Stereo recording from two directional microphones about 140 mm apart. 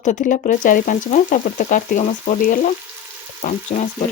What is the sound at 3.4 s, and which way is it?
Speech, 55° left (ahead or behind).